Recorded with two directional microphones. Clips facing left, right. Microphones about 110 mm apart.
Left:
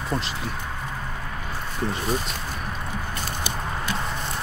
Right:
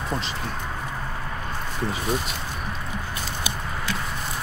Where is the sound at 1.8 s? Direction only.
Centre (ahead or behind).